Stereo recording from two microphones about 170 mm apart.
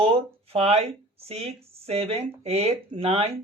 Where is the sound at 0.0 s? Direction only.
35° right (ahead or behind).